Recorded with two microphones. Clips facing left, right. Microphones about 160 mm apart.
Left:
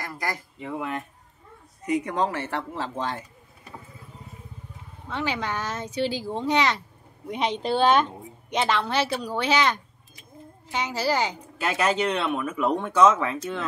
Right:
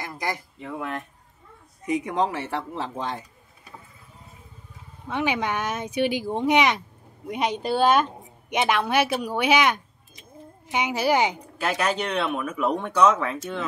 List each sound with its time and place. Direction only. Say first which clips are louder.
0.0 s speech: right 1 dB; 20° right (ahead or behind)
0.6 s speech: left 1 dB; 5° left (ahead or behind)
2.0 s speech: right 1 dB; 15° right (ahead or behind)
5.1 s speech: right 3 dB; 15° right (ahead or behind)
11.5 s speech: left 1 dB; centre (ahead or behind)